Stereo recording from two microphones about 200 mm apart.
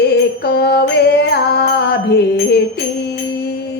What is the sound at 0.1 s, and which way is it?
Mantra, 55° left (ahead or behind).